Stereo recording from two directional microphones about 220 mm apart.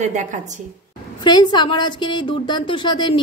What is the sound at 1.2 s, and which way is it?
A woman's voice, 20° left (ahead or behind).